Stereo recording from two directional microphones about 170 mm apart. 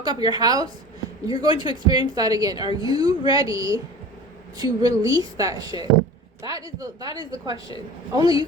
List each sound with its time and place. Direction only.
0.0 s a woman's voice: 25° right (ahead or behind)
1.5 s speech: 30° left (ahead or behind)
1.7 s a woman's voice: 25° right (ahead or behind)